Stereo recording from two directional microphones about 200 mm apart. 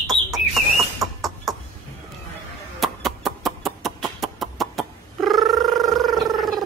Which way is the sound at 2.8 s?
Centre (ahead or behind).